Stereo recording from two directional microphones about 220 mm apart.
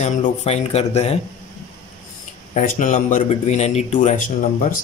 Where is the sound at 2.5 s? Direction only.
35° left (ahead or behind).